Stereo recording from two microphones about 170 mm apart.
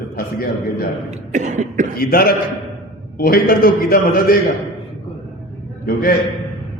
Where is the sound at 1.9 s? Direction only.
60° left (ahead or behind).